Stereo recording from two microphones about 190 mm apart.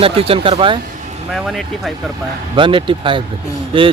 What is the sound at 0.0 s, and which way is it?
Speech, 30° right (ahead or behind).